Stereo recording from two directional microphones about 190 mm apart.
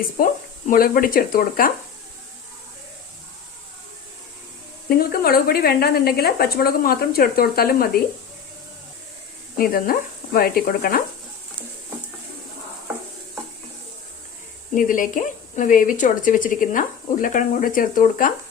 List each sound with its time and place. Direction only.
0.7 s a woman's voice: 50° left (ahead or behind)
4.9 s a woman's voice: 50° left (ahead or behind)
9.6 s a woman's voice: 50° left (ahead or behind)
14.8 s a woman's voice: 45° left (ahead or behind)